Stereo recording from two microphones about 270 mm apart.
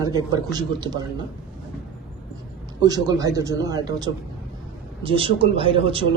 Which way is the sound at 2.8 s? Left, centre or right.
Centre.